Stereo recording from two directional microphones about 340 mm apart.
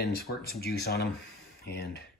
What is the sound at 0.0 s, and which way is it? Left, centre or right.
Speech, left.